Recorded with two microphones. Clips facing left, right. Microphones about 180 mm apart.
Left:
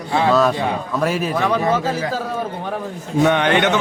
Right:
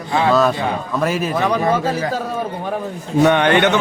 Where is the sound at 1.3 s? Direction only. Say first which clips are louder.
Right 1 dB; 20° right (ahead or behind).